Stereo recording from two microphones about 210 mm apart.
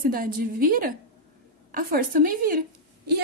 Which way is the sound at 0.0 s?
40° right (ahead or behind).